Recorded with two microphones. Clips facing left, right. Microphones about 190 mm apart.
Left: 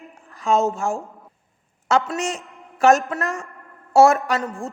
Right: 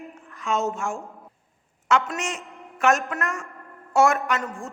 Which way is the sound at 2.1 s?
35° left (ahead or behind).